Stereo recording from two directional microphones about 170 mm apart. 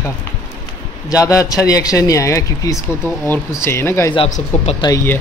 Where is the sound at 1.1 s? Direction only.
20° left (ahead or behind).